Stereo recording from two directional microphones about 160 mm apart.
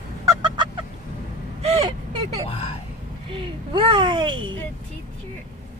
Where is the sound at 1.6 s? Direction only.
40° right (ahead or behind).